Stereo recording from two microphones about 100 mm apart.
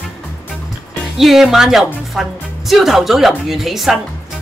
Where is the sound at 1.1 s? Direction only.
Centre (ahead or behind).